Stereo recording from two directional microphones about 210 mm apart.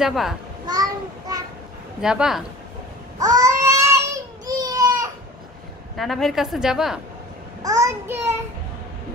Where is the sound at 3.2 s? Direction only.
15° right (ahead or behind).